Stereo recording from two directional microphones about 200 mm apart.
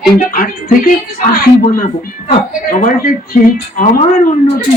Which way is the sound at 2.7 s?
45° left (ahead or behind).